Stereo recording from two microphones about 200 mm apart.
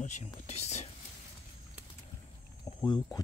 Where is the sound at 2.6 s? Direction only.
20° left (ahead or behind).